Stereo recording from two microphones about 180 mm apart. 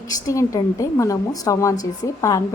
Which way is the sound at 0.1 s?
20° left (ahead or behind).